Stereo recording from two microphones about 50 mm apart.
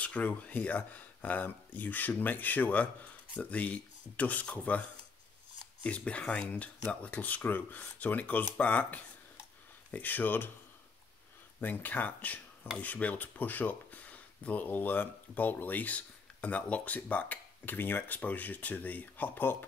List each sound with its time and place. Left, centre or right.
0.0 s speech: left
5.9 s speech: left
11.6 s speech: left